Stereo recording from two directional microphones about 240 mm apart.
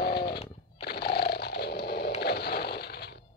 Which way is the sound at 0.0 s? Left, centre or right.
Left.